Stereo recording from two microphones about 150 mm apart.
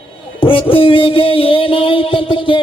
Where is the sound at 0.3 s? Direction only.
35° left (ahead or behind).